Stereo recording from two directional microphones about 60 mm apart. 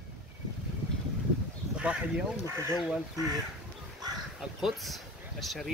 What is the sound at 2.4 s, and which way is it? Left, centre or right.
Speech, right.